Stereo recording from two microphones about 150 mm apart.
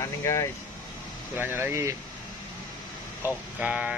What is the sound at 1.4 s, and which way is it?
Speech, 15° right (ahead or behind).